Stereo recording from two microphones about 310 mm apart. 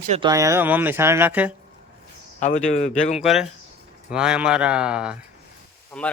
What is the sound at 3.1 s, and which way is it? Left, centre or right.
Speech, centre.